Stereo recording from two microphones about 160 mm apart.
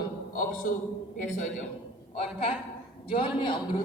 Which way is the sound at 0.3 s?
60° left (ahead or behind).